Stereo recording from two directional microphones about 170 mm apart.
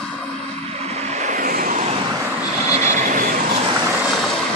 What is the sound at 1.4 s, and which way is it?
Vehicle, 55° right (ahead or behind).